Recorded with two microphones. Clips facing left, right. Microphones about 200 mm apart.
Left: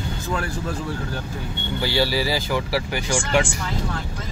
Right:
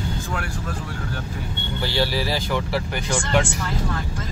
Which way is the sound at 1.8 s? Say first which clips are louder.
Left 2 dB; 5° left (ahead or behind).